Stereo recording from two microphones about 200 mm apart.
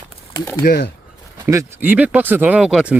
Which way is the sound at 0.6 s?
50° left (ahead or behind).